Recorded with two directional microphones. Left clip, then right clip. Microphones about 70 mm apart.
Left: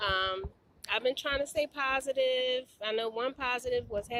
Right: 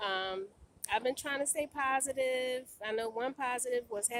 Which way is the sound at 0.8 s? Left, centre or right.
Right.